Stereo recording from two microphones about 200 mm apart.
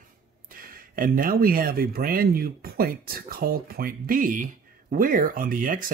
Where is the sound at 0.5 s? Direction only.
45° right (ahead or behind).